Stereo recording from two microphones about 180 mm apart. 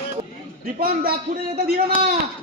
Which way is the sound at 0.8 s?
55° right (ahead or behind).